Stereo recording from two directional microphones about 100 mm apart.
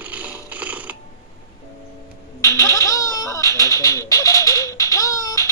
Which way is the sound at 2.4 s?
30° left (ahead or behind).